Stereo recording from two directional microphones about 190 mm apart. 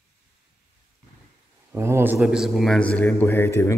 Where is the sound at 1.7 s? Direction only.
15° right (ahead or behind).